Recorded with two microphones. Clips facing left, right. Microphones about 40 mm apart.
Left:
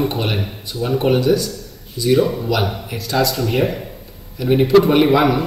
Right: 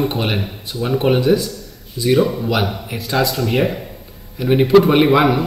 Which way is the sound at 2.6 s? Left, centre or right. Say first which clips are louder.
Even; centre.